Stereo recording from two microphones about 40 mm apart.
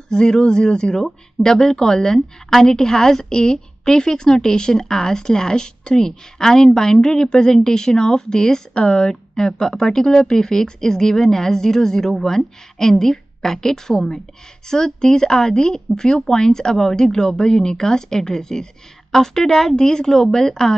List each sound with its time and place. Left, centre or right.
0.1 s speech: centre